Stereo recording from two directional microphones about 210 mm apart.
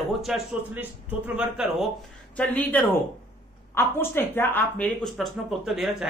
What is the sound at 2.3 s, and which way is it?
Speech, 5° left (ahead or behind).